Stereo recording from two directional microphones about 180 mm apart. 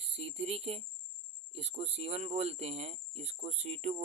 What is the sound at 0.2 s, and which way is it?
Speech, 35° right (ahead or behind).